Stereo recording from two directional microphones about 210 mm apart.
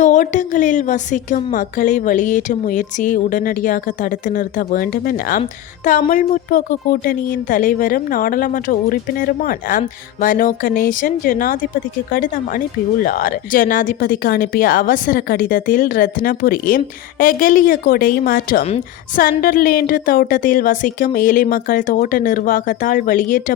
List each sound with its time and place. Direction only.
0.0 s speech: 35° left (ahead or behind)